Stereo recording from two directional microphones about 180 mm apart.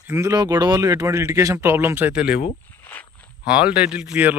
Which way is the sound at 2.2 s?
60° left (ahead or behind).